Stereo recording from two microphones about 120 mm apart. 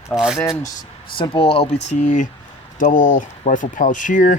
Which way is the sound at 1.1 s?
45° left (ahead or behind).